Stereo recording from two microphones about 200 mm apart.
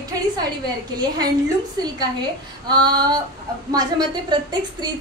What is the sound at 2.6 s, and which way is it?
A woman's voice, 20° right (ahead or behind).